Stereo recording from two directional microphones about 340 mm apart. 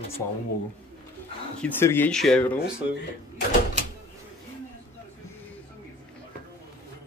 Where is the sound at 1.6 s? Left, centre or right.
Centre.